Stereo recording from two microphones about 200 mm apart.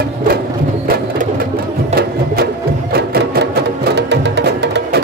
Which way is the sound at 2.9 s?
55° right (ahead or behind).